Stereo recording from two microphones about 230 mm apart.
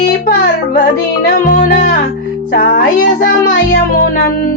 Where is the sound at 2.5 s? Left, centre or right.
Left.